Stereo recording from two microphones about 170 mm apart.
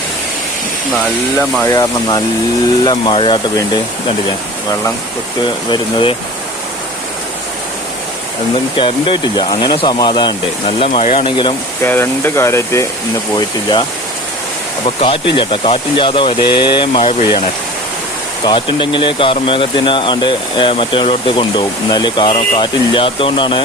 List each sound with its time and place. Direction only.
1.6 s speech: 20° left (ahead or behind)
5.7 s speech: 30° left (ahead or behind)
8.7 s speech: 30° left (ahead or behind)
11.8 s speech: 15° left (ahead or behind)
14.8 s speech: 30° left (ahead or behind)
18.4 s speech: 30° left (ahead or behind)